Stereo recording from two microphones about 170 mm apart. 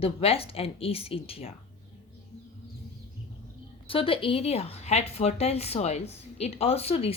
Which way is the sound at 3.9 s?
30° left (ahead or behind).